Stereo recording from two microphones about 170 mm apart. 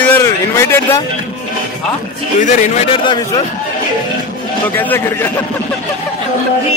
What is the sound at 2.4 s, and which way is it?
Speech, 45° left (ahead or behind).